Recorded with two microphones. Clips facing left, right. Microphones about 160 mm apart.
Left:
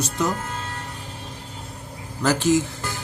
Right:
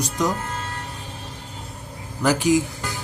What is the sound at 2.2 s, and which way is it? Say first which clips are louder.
Speech: right 1 dB; 15° right (ahead or behind).